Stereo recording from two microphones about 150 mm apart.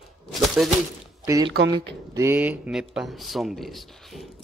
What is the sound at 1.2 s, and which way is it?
Speech, 20° right (ahead or behind).